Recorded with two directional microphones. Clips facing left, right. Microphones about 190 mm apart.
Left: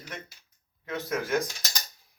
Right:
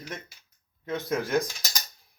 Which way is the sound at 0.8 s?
15° right (ahead or behind).